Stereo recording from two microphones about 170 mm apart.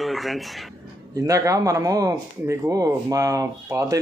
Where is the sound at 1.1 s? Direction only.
20° right (ahead or behind).